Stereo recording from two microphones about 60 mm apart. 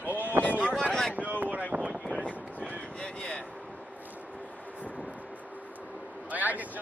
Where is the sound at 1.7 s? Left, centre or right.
Right.